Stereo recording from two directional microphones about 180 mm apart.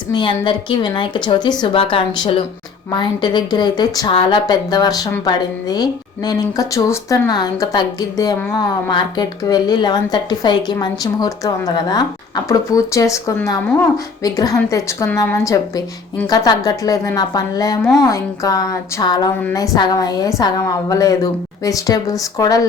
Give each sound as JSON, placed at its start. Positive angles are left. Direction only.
{"t": 0.1, "sound": "speech", "side_deg": 25}